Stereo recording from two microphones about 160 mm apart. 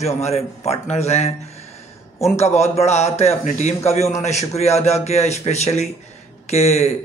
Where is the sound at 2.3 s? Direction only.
45° left (ahead or behind).